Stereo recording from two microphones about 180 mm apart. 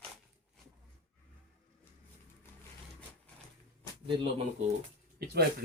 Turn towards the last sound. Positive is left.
turn(degrees=-60)  # may be behind; listen again after turning